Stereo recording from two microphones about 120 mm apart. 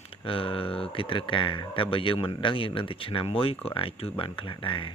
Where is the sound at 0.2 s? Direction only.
50° left (ahead or behind).